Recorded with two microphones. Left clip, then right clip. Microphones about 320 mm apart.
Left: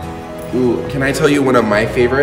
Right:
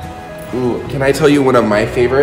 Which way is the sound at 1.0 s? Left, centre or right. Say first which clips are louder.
Right 3 dB; centre.